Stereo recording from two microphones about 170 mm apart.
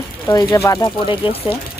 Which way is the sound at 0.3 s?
20° left (ahead or behind).